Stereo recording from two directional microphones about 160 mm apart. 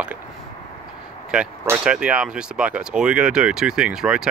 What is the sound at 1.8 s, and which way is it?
Speech, 5° right (ahead or behind).